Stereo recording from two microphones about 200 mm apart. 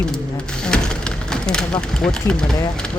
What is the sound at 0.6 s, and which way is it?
Speech, 5° left (ahead or behind).